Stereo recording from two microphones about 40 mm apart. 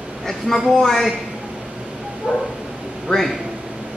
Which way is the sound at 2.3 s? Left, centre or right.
Right.